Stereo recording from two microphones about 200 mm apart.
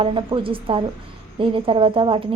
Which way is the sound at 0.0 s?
25° right (ahead or behind).